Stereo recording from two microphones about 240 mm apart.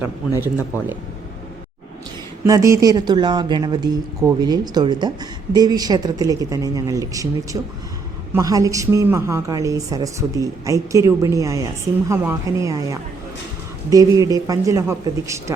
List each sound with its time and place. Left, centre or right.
2.4 s speech: centre